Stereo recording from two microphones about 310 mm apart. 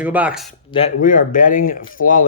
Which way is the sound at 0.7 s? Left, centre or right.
Left.